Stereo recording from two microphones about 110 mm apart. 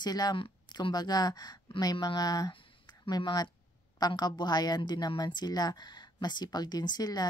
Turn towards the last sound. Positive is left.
turn(degrees=35)  # may be behind; listen again after turning